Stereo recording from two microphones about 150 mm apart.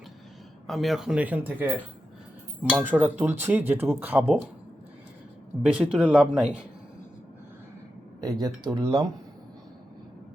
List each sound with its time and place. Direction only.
0.7 s speech: centre (ahead or behind)
5.6 s speech: 5° right (ahead or behind)
8.2 s speech: 25° right (ahead or behind)